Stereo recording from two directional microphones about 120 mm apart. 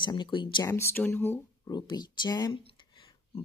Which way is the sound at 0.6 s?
20° left (ahead or behind).